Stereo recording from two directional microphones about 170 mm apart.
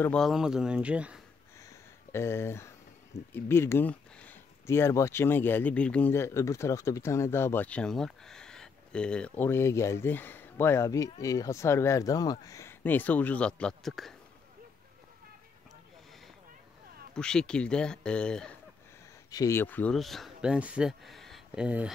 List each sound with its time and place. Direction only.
0.0 s speech: 5° left (ahead or behind)
2.1 s speech: 15° left (ahead or behind)
17.1 s speech: 5° left (ahead or behind)
19.3 s speech: 15° left (ahead or behind); by 21.9 s 5° right (ahead or behind)